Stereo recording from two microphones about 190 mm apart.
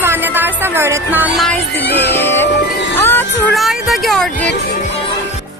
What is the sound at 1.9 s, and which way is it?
Music, 60° left (ahead or behind).